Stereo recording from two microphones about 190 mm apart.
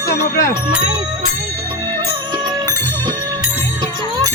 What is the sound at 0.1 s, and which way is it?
Speech, 55° left (ahead or behind).